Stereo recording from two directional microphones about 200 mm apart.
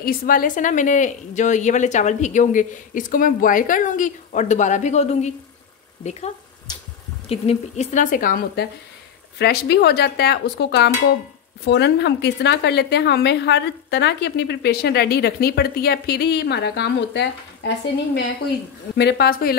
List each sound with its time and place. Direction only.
0.0 s a woman's voice: 45° left (ahead or behind)
6.7 s a sound: 20° left (ahead or behind)
7.2 s a woman's voice: 30° left (ahead or behind); by 17.3 s 60° left (ahead or behind)
18.9 s a woman's voice: 55° left (ahead or behind)